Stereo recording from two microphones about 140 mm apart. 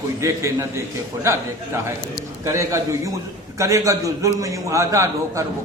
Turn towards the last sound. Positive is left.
turn(degrees=-20)  # may be behind; listen again after turning